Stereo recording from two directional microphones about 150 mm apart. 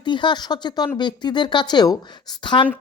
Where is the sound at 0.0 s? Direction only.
30° left (ahead or behind).